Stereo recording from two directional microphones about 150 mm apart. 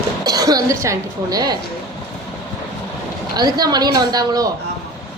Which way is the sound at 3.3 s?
25° right (ahead or behind).